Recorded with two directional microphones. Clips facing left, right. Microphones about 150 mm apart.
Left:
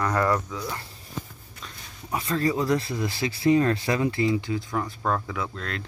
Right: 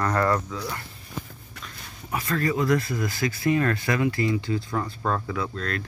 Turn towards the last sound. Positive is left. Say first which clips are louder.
# right 3 dB
turn(degrees=15)  # may be behind; listen again after turning